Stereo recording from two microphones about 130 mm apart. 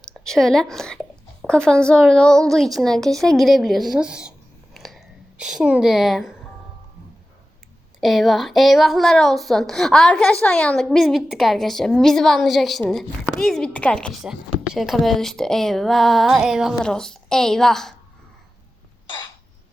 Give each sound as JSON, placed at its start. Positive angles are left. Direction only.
{"t": 0.0, "sound": "a woman's voice", "side_deg": 5}
{"t": 8.0, "sound": "a woman's voice", "side_deg": 0}